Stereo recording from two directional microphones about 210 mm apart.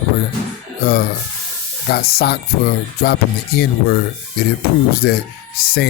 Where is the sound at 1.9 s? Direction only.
50° left (ahead or behind).